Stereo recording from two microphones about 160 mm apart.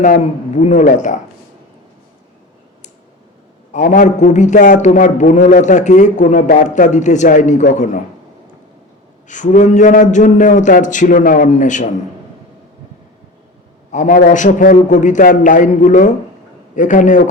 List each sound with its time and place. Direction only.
0.0 s a man's voice: 50° left (ahead or behind)
3.7 s a man's voice: 55° left (ahead or behind)
9.2 s a man's voice: 50° left (ahead or behind)
13.9 s a man's voice: 50° left (ahead or behind)